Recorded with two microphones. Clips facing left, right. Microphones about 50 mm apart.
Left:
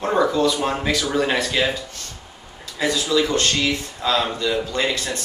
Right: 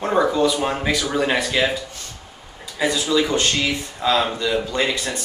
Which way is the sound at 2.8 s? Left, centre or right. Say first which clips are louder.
Even; centre.